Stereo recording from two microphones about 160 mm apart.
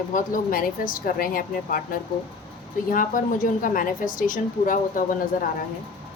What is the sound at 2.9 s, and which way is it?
A woman's voice, 55° left (ahead or behind).